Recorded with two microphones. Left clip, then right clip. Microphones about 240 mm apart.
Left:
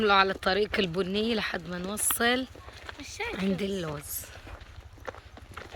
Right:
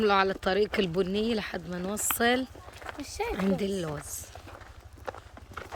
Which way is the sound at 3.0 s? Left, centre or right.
Right.